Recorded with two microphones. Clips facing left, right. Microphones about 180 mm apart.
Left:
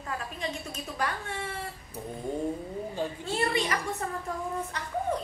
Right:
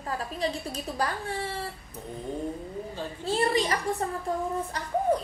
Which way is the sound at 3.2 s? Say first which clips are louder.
Right 5 dB; 35° right (ahead or behind).